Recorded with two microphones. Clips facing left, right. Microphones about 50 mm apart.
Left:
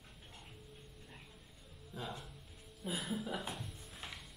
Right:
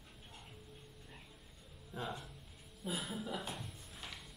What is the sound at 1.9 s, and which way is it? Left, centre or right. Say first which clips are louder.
Music: right 2 dB; centre.